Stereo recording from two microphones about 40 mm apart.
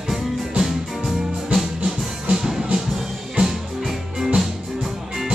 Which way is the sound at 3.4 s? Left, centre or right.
Centre.